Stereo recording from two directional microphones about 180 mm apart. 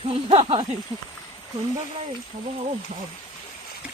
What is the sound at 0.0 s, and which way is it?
Speech, 30° right (ahead or behind).